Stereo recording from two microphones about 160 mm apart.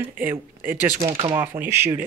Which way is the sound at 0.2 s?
10° right (ahead or behind).